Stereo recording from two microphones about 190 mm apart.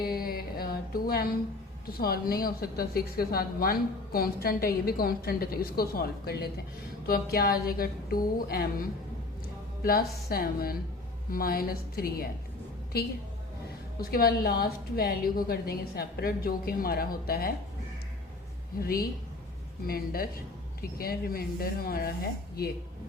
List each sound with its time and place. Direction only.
0.0 s music: 50° left (ahead or behind)
1.9 s a woman's voice: 55° left (ahead or behind)
9.8 s a woman's voice: 50° left (ahead or behind)
14.0 s a woman's voice: 50° left (ahead or behind)
18.8 s a woman's voice: 50° left (ahead or behind)